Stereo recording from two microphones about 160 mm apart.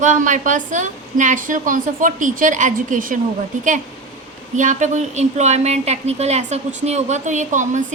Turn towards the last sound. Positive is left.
turn(degrees=-50)  # may be behind; listen again after turning